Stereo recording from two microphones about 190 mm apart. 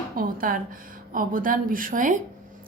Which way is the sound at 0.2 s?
50° right (ahead or behind).